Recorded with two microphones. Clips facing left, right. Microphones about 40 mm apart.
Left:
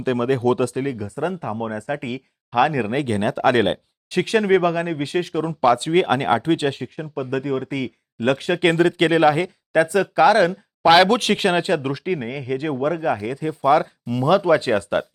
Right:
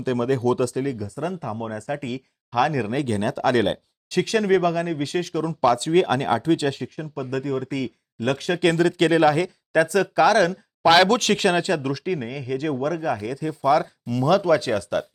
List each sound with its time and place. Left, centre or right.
0.0 s speech: left